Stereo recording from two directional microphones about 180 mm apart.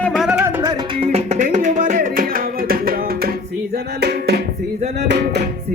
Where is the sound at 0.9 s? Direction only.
35° right (ahead or behind); by 2.9 s 55° right (ahead or behind).